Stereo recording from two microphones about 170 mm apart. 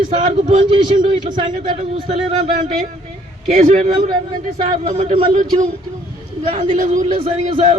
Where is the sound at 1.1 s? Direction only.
25° right (ahead or behind).